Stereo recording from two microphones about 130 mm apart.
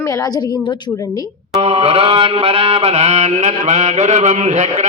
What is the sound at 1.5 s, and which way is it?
Mantra, 50° right (ahead or behind).